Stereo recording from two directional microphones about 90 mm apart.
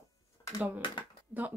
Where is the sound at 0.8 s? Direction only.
70° left (ahead or behind).